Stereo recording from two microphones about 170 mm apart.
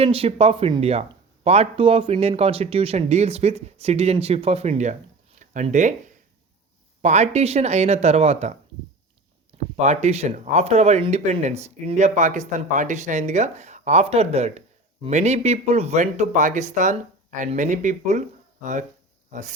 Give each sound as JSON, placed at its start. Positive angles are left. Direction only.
{"t": 0.0, "sound": "speech", "side_deg": -35}
{"t": 9.8, "sound": "speech", "side_deg": -40}